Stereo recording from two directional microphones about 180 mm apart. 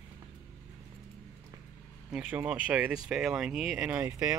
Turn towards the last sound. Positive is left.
turn(degrees=-10)  # may be behind; listen again after turning